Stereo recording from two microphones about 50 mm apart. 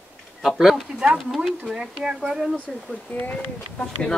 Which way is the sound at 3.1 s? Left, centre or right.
Left.